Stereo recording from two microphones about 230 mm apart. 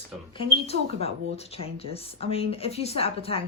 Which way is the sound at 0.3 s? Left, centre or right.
Left.